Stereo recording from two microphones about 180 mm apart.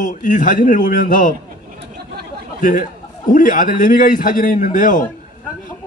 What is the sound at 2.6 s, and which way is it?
A man's voice, 45° left (ahead or behind).